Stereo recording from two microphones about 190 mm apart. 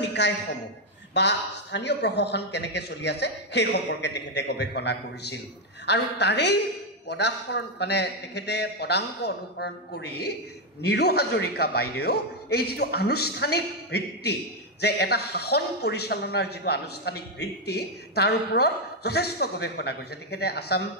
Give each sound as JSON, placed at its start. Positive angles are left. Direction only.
{"t": 0.0, "sound": "a man's voice", "side_deg": 65}